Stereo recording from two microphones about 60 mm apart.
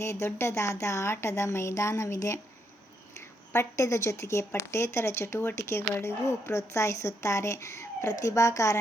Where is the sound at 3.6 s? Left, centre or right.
Left.